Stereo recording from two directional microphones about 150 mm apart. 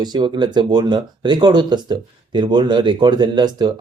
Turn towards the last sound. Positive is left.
turn(degrees=-30)  # may be behind; listen again after turning